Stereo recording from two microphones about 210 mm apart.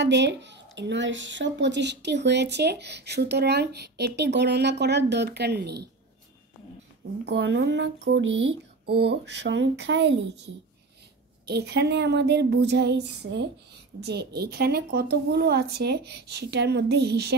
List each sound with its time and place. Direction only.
0.0 s speech: 55° right (ahead or behind)
7.2 s speech: 55° right (ahead or behind)